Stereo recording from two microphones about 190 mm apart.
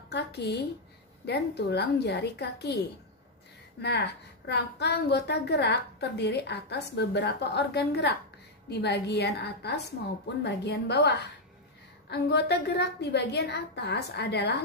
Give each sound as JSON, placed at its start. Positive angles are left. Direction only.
{"t": 0.1, "sound": "a woman's voice", "side_deg": 60}
{"t": 3.8, "sound": "a woman's voice", "side_deg": 60}